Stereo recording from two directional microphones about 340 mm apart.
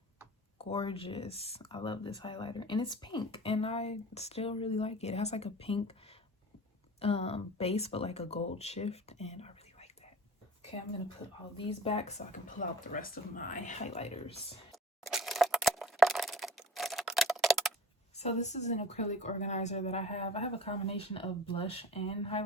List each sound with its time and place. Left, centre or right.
0.6 s speech: centre
11.5 s speech: centre
14.7 s a sound: centre
18.2 s speech: centre